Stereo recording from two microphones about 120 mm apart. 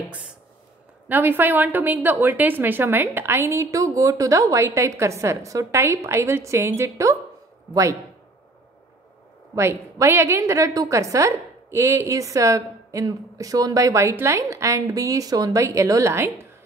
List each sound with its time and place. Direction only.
1.0 s a woman's voice: 15° right (ahead or behind)
9.6 s a woman's voice: 20° right (ahead or behind)